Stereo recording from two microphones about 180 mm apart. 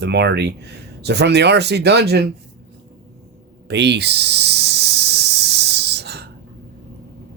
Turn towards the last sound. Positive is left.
turn(degrees=-65)  # may be behind; listen again after turning